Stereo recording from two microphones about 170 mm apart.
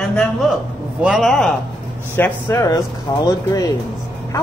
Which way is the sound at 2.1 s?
15° left (ahead or behind).